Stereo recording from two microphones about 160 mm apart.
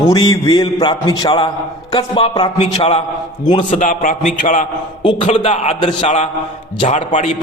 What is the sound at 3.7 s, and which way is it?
A man's voice, 50° left (ahead or behind).